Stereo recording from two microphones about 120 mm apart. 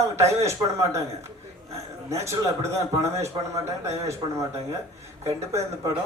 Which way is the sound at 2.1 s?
25° right (ahead or behind).